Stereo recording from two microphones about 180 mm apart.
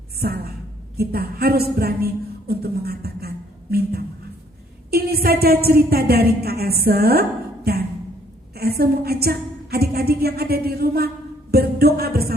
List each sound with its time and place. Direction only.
0.2 s a woman's voice: 60° right (ahead or behind)
11.5 s music: 60° right (ahead or behind)